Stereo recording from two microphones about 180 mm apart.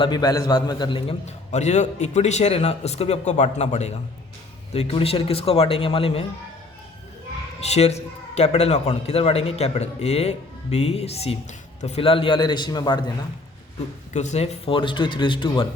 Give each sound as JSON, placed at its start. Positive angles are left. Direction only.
{"t": 0.0, "sound": "a man's voice", "side_deg": 25}
{"t": 7.6, "sound": "a man's voice", "side_deg": 35}
{"t": 14.1, "sound": "speech", "side_deg": 40}